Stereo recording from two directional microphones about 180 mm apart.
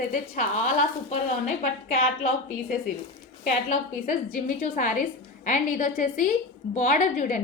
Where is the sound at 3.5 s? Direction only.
50° left (ahead or behind).